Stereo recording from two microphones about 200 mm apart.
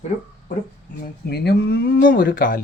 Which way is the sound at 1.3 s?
50° left (ahead or behind).